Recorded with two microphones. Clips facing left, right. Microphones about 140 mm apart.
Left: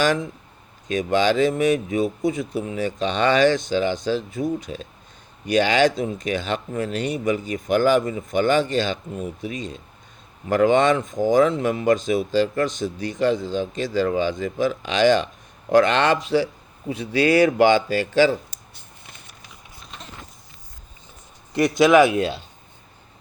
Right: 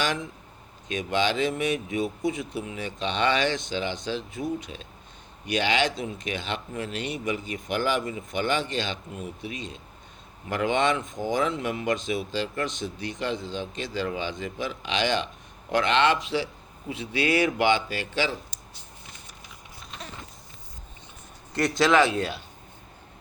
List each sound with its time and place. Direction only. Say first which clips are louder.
0.9 s speech: left 6 dB; 40° left (ahead or behind); by 19.4 s 60° left (ahead or behind)
21.5 s a man's voice: left 6 dB; 15° left (ahead or behind)